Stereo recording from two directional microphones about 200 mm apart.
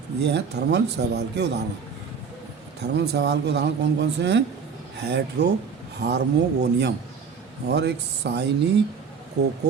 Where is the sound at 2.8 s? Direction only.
60° right (ahead or behind).